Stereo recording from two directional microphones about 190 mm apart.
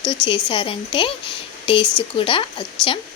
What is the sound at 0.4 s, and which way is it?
Speech, 25° left (ahead or behind).